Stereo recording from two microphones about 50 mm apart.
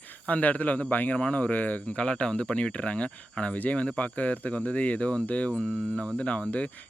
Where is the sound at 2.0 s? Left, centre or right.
Centre.